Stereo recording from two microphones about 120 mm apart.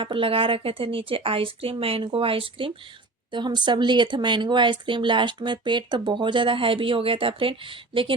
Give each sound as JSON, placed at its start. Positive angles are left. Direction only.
{"t": 0.0, "sound": "speech", "side_deg": -50}